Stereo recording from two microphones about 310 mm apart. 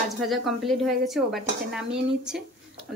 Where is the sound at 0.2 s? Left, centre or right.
Centre.